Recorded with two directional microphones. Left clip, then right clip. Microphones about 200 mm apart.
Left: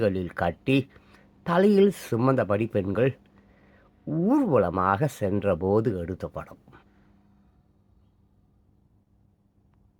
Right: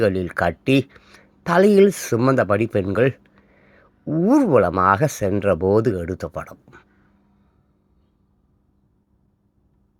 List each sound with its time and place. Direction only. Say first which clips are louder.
0.0 s speech: right 6 dB; 10° right (ahead or behind)